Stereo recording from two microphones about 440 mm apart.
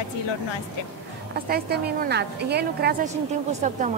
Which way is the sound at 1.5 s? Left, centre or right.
Right.